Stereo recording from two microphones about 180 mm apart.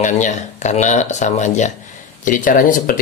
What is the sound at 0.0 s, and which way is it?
Speech, 40° left (ahead or behind).